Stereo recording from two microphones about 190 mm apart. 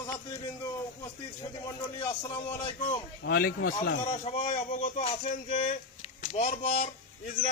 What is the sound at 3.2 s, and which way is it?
Speech, 55° left (ahead or behind).